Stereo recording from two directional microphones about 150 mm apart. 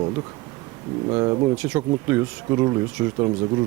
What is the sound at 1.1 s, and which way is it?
Speech, 25° right (ahead or behind).